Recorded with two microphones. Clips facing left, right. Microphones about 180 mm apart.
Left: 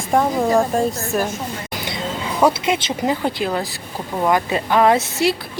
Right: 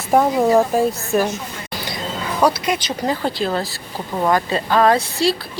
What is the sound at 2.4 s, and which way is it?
A woman's voice, 25° left (ahead or behind).